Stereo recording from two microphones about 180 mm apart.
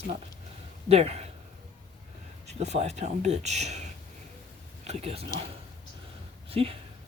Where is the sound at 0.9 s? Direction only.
35° right (ahead or behind).